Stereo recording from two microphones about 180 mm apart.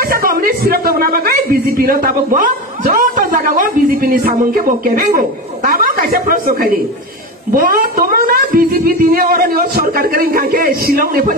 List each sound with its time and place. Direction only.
0.1 s a man's voice: 55° right (ahead or behind)